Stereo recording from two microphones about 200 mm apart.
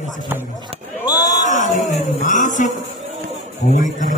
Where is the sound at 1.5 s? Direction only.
40° left (ahead or behind).